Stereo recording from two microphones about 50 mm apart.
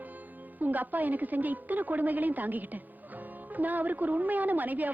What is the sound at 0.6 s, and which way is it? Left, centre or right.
A woman's voice, right.